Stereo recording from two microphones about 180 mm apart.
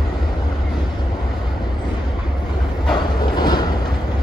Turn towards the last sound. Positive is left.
turn(degrees=25)  # may be behind; listen again after turning